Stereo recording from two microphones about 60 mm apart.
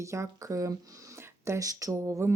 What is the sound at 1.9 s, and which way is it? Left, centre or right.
Speech, right.